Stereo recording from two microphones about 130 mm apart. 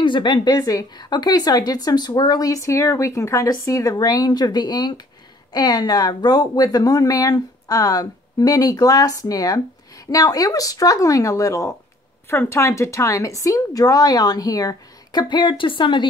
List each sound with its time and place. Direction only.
0.0 s a woman's voice: 40° left (ahead or behind)